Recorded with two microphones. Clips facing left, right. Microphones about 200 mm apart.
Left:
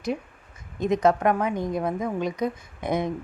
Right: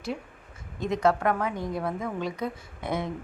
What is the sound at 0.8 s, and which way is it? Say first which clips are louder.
A woman's voice: left 3 dB; 20° left (ahead or behind).